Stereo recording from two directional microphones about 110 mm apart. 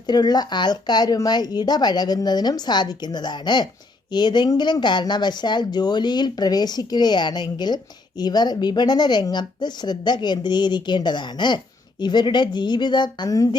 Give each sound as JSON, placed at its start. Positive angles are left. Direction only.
{"t": 0.1, "sound": "a woman's voice", "side_deg": 40}